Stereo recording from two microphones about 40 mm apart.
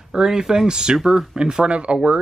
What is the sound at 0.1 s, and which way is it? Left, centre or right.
Speech, centre.